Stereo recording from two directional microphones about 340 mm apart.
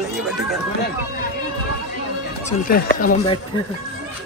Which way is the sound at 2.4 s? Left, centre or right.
Left.